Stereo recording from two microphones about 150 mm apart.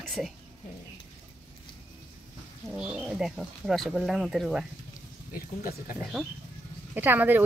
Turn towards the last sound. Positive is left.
turn(degrees=-15)  # may be behind; listen again after turning